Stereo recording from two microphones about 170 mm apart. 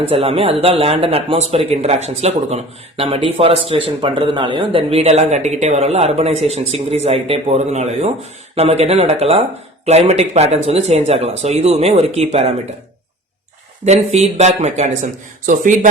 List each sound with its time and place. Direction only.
0.1 s speech: 35° right (ahead or behind)
13.8 s speech: 40° right (ahead or behind)